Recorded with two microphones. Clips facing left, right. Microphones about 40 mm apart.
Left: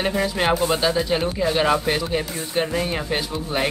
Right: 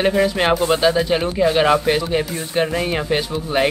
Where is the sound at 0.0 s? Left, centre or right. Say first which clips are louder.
Right 5 dB; centre.